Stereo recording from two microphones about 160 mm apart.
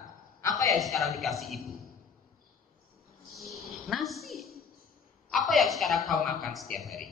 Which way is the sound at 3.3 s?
Centre (ahead or behind).